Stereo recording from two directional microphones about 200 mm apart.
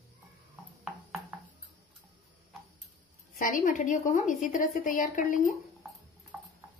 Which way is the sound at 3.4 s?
40° left (ahead or behind).